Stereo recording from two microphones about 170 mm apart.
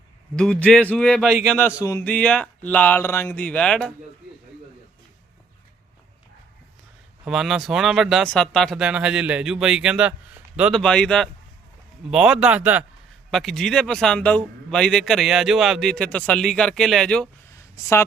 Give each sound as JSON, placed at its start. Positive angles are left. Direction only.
{"t": 0.3, "sound": "speech", "side_deg": 5}
{"t": 1.5, "sound": "speech", "side_deg": 15}
{"t": 7.3, "sound": "speech", "side_deg": 0}
{"t": 17.5, "sound": "a sound", "side_deg": 15}